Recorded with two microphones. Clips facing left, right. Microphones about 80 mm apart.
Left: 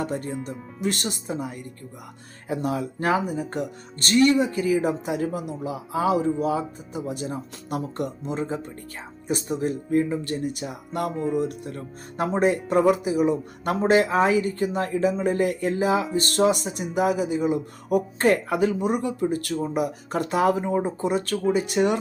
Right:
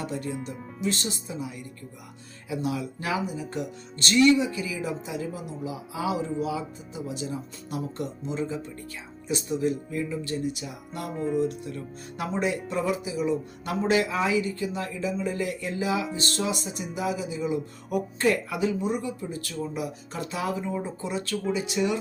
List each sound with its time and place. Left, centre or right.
0.0 s speech: left
11.1 s music: centre
11.3 s speech: left